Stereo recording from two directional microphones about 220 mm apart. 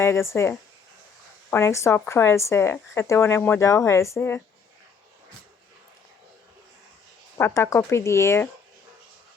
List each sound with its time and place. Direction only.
0.0 s speech: 10° left (ahead or behind)
1.5 s speech: 10° left (ahead or behind)
7.3 s speech: 10° left (ahead or behind)